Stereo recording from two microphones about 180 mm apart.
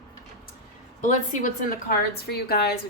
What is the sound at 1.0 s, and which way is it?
Speech, 45° left (ahead or behind).